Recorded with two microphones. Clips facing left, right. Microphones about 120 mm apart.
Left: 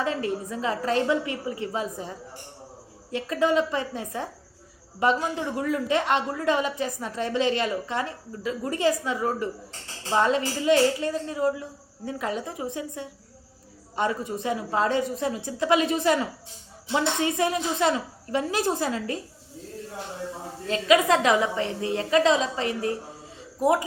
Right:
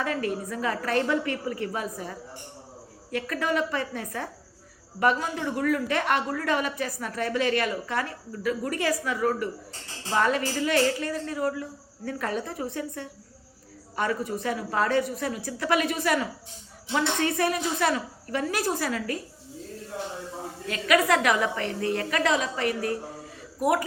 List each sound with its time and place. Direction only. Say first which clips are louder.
0.0 s a woman's voice: left 1 dB; 25° left (ahead or behind)
5.5 s a woman's voice: even; 25° left (ahead or behind)
20.7 s a woman's voice: left 2 dB; 25° left (ahead or behind)